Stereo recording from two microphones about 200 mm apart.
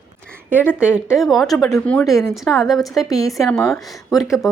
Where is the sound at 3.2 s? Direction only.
15° left (ahead or behind).